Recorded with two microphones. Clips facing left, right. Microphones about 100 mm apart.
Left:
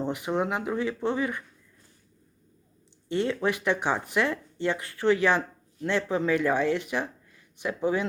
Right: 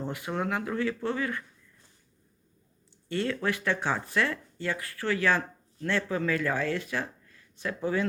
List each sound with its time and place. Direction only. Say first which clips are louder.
0.0 s speech: left 4 dB; 20° left (ahead or behind)
3.1 s speech: left 3 dB; 20° left (ahead or behind)